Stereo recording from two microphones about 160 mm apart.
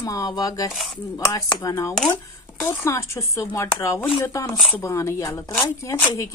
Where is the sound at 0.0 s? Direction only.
20° left (ahead or behind).